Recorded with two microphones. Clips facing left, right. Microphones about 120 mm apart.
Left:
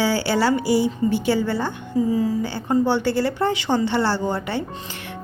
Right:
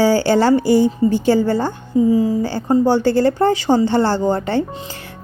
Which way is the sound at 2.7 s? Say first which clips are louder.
Right 5 dB; 40° right (ahead or behind).